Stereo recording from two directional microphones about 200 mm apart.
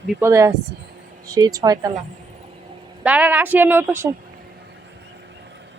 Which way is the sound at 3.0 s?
5° right (ahead or behind).